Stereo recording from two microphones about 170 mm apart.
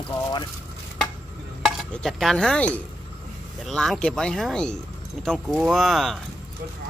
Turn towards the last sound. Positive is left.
turn(degrees=0)  # may be behind; listen again after turning